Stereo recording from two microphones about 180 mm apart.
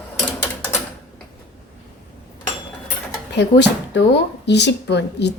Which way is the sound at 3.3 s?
75° left (ahead or behind).